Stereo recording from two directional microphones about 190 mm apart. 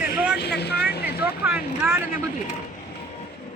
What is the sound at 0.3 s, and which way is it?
Vehicle, 60° left (ahead or behind).